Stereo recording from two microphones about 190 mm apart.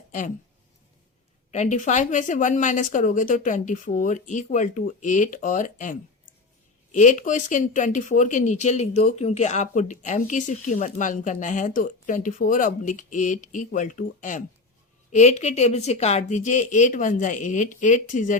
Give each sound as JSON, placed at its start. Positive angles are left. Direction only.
{"t": 1.5, "sound": "speech", "side_deg": 35}